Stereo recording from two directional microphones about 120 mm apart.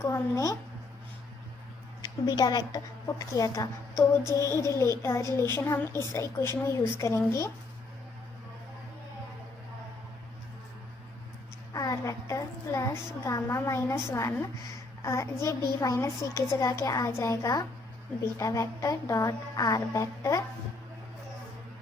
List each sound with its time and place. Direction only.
0.0 s a woman's voice: 25° left (ahead or behind)
2.0 s a woman's voice: 35° left (ahead or behind)
11.7 s a woman's voice: 30° left (ahead or behind)